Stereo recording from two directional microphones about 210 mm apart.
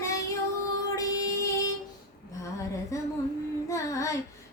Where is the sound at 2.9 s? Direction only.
15° left (ahead or behind).